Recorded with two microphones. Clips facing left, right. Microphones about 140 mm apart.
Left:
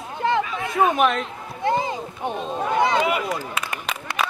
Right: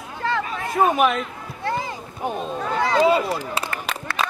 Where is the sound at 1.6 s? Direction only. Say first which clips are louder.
Left 4 dB; 20° left (ahead or behind).